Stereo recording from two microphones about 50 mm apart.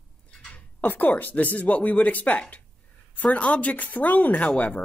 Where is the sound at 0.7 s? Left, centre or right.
Left.